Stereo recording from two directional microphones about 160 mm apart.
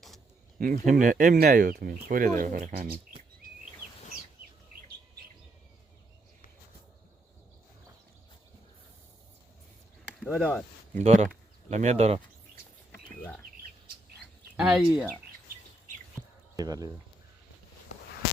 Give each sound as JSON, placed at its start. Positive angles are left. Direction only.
{"t": 0.6, "sound": "speech", "side_deg": -60}
{"t": 10.2, "sound": "speech", "side_deg": -10}
{"t": 10.9, "sound": "speech", "side_deg": -45}
{"t": 14.5, "sound": "speech", "side_deg": -5}
{"t": 16.6, "sound": "speech", "side_deg": -25}